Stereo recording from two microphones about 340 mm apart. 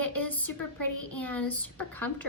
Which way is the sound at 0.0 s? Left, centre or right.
Centre.